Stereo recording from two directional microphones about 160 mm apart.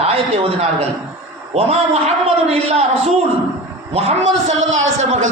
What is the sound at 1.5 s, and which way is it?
A man's voice, 40° right (ahead or behind).